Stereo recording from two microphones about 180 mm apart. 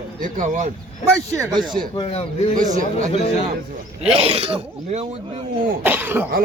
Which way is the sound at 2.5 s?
45° right (ahead or behind).